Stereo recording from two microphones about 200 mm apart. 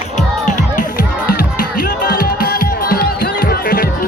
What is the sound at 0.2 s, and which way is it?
Music, 40° left (ahead or behind).